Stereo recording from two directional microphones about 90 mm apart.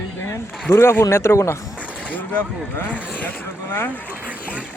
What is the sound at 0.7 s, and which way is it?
Speech, 30° left (ahead or behind).